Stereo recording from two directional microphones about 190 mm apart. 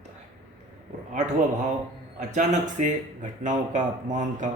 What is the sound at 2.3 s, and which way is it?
Speech, 40° right (ahead or behind).